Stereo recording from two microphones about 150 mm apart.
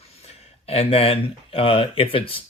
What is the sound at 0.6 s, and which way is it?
Speech, 40° left (ahead or behind).